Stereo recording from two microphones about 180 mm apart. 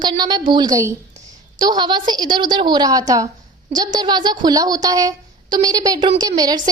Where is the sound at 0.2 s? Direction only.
25° right (ahead or behind).